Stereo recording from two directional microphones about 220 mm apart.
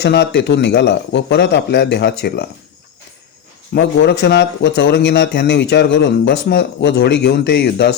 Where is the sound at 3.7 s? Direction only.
50° left (ahead or behind).